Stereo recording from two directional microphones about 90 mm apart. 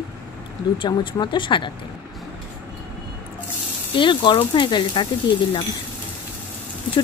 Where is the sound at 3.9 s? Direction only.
65° left (ahead or behind).